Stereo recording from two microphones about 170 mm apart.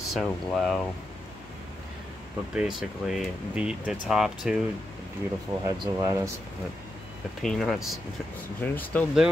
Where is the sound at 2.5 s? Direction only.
Centre (ahead or behind).